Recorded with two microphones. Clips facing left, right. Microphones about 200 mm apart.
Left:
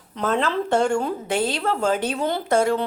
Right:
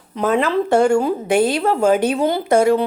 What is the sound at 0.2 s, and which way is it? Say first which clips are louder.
A woman's voice: right 5 dB; 10° right (ahead or behind).